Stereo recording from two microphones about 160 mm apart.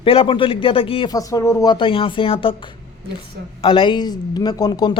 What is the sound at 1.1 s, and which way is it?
A woman's voice, 20° left (ahead or behind).